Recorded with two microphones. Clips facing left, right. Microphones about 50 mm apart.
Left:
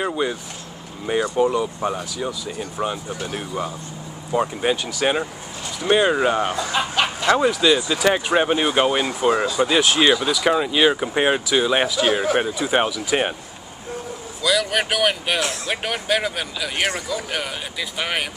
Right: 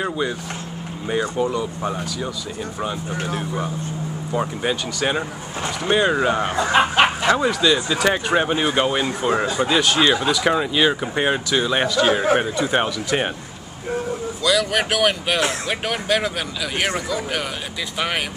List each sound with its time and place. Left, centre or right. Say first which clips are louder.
0.0 s speech: left 1 dB; centre
4.3 s speech: left 3 dB; centre
6.5 s speech: right 5 dB; right
7.3 s speech: left 1 dB; centre
10.2 s speech: even; centre
14.4 s speech: even; centre